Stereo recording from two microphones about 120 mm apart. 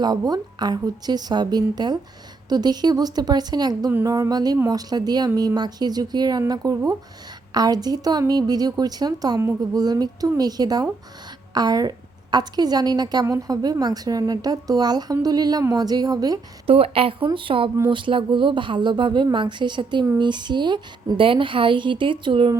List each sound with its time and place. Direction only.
0.0 s a woman's voice: 35° right (ahead or behind)
16.6 s a woman's voice: 55° right (ahead or behind)